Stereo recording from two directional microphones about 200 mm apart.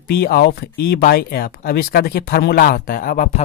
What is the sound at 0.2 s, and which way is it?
Speech, 50° left (ahead or behind).